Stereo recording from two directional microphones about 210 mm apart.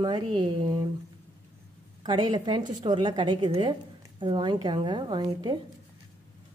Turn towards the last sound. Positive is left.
turn(degrees=-20)  # may be behind; listen again after turning